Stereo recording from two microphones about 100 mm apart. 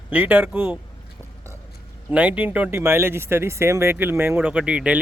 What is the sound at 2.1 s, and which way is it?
Speech, 15° right (ahead or behind).